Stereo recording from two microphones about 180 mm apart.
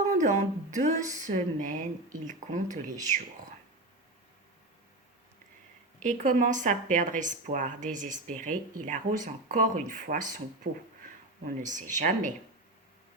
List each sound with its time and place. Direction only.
0.1 s speech: 40° right (ahead or behind)
6.0 s speech: 45° right (ahead or behind)